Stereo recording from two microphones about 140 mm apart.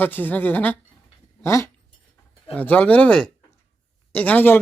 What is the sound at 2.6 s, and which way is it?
Speech, 10° left (ahead or behind).